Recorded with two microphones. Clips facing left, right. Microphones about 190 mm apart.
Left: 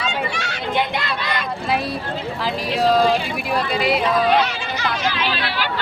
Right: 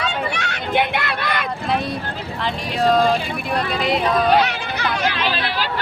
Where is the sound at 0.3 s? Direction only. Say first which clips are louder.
Right 2 dB; 60° right (ahead or behind).